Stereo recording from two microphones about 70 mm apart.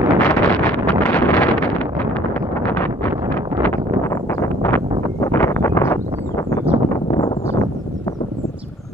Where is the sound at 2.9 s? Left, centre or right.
Right.